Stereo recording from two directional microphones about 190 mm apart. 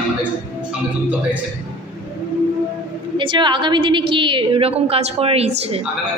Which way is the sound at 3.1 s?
25° right (ahead or behind).